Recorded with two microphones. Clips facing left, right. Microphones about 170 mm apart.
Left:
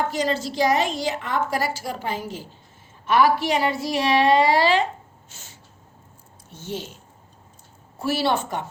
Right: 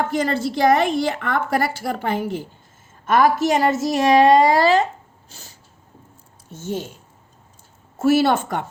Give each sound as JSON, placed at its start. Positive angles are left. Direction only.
{"t": 0.1, "sound": "a woman's voice", "side_deg": -55}
{"t": 3.1, "sound": "a woman's voice", "side_deg": -45}
{"t": 5.3, "sound": "snort", "side_deg": -35}
{"t": 6.5, "sound": "a woman's voice", "side_deg": -45}
{"t": 7.9, "sound": "a woman's voice", "side_deg": -50}